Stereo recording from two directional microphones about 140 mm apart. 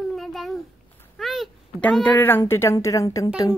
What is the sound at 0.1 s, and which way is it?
Babbling, centre (ahead or behind).